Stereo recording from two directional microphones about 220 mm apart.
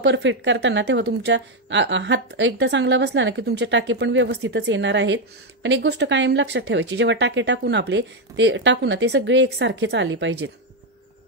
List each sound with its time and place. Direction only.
0.0 s a woman's voice: 55° right (ahead or behind)